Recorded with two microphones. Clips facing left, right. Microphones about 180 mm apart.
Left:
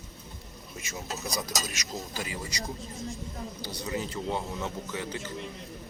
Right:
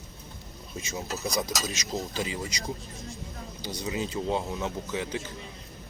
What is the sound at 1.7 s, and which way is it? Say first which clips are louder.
Speech: right 5 dB; 20° right (ahead or behind).